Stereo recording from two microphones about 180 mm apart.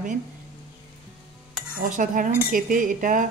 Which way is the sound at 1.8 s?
45° right (ahead or behind).